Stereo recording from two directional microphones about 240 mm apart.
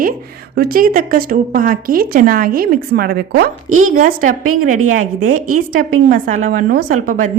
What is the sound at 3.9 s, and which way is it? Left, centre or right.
Speech, right.